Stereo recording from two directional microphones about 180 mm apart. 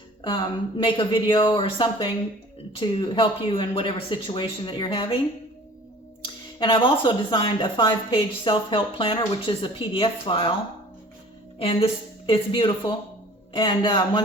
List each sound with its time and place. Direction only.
0.3 s speech: 25° left (ahead or behind)
6.2 s speech: 25° left (ahead or behind)
11.6 s speech: 30° left (ahead or behind)